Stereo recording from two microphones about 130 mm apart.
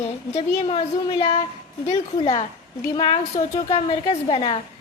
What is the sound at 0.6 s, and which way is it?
Child singing, 45° left (ahead or behind).